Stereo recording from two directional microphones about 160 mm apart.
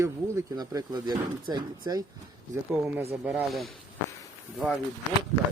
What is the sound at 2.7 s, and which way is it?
Mantra, 10° right (ahead or behind).